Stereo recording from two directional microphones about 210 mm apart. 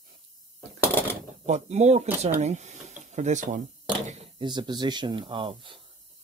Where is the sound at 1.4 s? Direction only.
30° right (ahead or behind).